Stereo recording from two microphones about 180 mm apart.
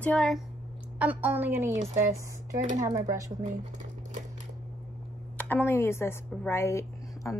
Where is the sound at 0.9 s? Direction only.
10° right (ahead or behind).